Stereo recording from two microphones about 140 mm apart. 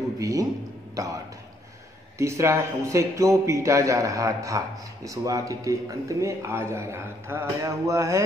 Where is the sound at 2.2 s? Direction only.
20° right (ahead or behind).